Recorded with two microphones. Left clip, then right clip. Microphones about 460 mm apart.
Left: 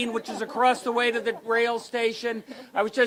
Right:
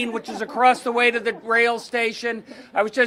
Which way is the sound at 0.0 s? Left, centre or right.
Right.